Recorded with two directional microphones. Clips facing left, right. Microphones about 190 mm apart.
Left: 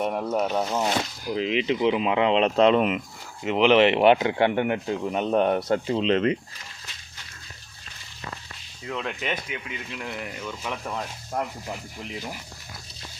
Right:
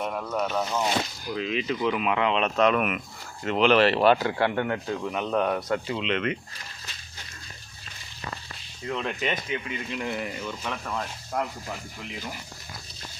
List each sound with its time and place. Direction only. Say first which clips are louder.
0.0 s speech: left 4 dB; 30° left (ahead or behind)
8.8 s speech: right 2 dB; centre (ahead or behind)